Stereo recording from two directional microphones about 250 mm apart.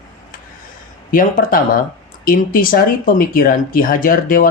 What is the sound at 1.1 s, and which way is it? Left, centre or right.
Speech, left.